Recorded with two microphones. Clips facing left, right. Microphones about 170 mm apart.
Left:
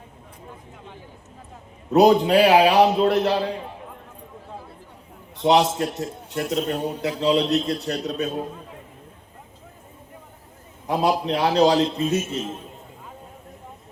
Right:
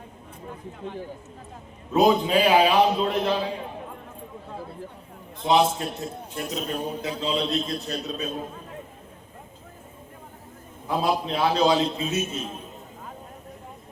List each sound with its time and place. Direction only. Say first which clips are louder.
1.9 s a man's voice: left 4 dB; 75° left (ahead or behind)
5.4 s a man's voice: left 3 dB; 80° left
10.8 s a man's voice: left 3 dB; 75° left (ahead or behind)